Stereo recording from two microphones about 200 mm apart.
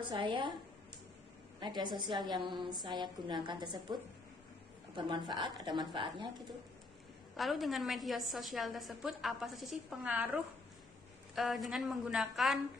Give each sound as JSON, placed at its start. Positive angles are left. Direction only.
{"t": 0.0, "sound": "a woman's voice", "side_deg": -25}
{"t": 1.5, "sound": "a woman's voice", "side_deg": -20}
{"t": 4.9, "sound": "a woman's voice", "side_deg": -20}
{"t": 7.3, "sound": "a woman's voice", "side_deg": 0}